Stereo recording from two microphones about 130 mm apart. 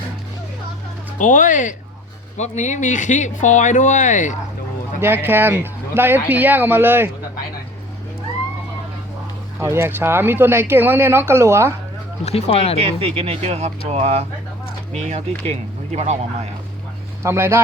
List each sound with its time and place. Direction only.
1.2 s speech: 80° left
2.4 s speech: 65° left (ahead or behind)
4.9 s speech: 15° right (ahead or behind)
9.6 s speech: 20° right (ahead or behind)
12.2 s speech: 50° left (ahead or behind)
13.0 s speech: 50° right (ahead or behind)
17.2 s speech: 20° right (ahead or behind)